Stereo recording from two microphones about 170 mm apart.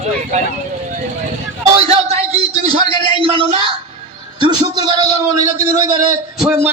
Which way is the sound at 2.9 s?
30° right (ahead or behind).